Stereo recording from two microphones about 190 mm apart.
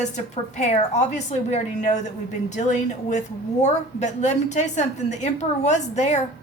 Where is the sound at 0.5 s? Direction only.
35° left (ahead or behind).